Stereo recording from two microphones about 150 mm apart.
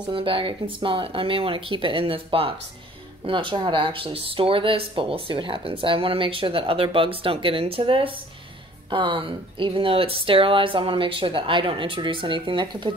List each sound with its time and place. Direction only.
0.1 s speech: 35° right (ahead or behind)